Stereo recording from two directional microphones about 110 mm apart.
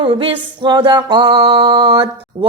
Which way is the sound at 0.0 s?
50° right (ahead or behind).